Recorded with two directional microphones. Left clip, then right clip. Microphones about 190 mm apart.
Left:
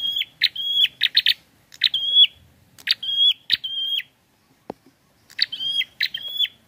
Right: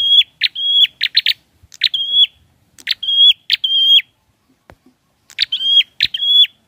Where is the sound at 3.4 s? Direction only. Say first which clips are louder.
Right 10 dB; 20° right (ahead or behind).